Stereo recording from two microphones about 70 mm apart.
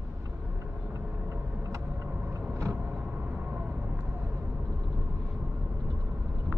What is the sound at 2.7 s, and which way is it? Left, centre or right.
Vehicle, right.